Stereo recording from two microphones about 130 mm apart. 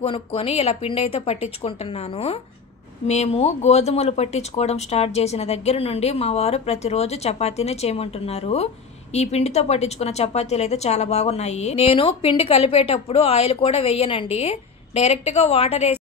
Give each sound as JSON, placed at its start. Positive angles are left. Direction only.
{"t": 0.0, "sound": "a woman's voice", "side_deg": 45}